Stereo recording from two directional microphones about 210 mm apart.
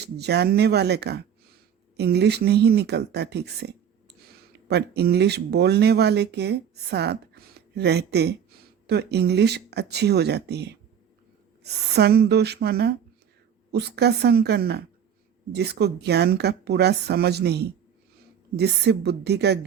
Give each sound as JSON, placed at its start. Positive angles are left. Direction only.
{"t": 0.0, "sound": "a woman's voice", "side_deg": -50}